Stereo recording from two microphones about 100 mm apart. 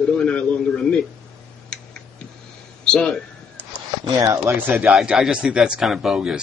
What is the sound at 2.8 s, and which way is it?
Speech, 5° left (ahead or behind).